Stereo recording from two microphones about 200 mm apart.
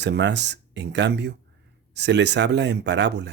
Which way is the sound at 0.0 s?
60° right (ahead or behind).